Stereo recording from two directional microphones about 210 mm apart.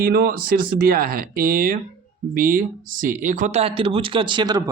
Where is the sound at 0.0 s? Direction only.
45° right (ahead or behind).